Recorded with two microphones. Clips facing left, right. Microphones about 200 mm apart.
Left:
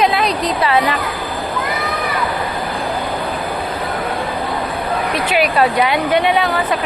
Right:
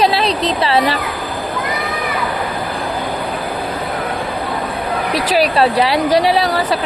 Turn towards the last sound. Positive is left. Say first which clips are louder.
# right 1 dB
turn(degrees=-35)  # may be behind; listen again after turning